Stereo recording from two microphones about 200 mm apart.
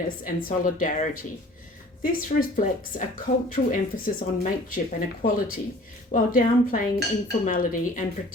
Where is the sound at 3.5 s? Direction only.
40° left (ahead or behind).